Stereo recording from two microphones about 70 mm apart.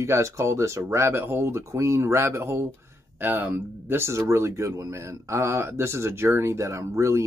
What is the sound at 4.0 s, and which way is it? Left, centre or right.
Speech, right.